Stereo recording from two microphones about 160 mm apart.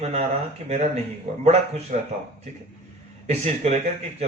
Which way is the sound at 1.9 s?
50° right (ahead or behind).